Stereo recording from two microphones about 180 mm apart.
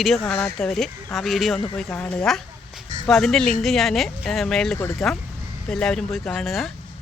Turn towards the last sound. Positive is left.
turn(degrees=0)  # may be behind; listen again after turning